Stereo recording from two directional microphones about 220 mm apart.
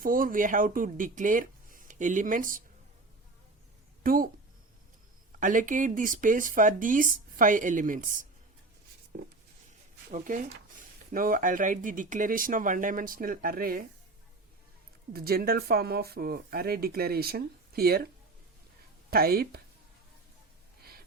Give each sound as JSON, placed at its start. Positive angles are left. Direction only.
{"t": 0.0, "sound": "speech", "side_deg": -40}
{"t": 4.0, "sound": "speech", "side_deg": -40}
{"t": 5.4, "sound": "speech", "side_deg": -35}
{"t": 15.1, "sound": "speech", "side_deg": -45}
{"t": 19.1, "sound": "speech", "side_deg": -45}